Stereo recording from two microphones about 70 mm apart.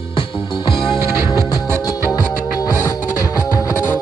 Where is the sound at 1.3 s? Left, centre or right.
Left.